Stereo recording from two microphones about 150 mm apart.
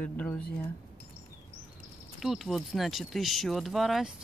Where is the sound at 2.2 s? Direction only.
Centre (ahead or behind).